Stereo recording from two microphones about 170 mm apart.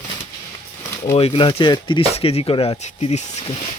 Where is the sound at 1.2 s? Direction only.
30° left (ahead or behind).